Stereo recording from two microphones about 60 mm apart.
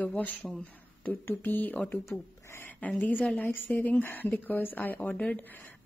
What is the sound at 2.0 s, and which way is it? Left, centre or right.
Speech, left.